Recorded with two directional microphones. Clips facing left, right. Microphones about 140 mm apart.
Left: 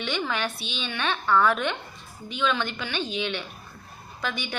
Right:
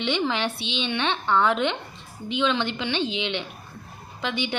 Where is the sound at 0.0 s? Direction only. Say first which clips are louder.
Right 4 dB; 25° right (ahead or behind).